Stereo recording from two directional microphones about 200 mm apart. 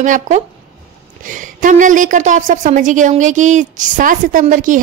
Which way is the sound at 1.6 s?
40° right (ahead or behind).